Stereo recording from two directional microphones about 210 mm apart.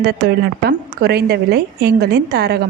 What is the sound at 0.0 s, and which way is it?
A woman's voice, 50° right (ahead or behind).